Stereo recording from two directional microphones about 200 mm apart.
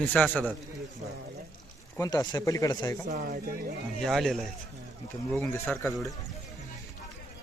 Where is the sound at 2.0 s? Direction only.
20° left (ahead or behind).